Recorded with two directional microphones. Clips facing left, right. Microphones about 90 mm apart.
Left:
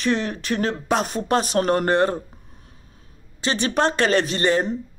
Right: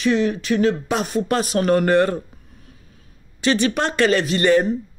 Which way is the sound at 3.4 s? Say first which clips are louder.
Right 2 dB; 30° left (ahead or behind).